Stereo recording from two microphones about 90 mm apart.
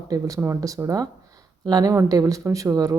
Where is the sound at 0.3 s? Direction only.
30° right (ahead or behind).